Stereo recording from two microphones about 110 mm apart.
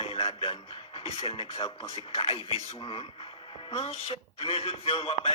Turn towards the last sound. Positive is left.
turn(degrees=60)  # may be behind; listen again after turning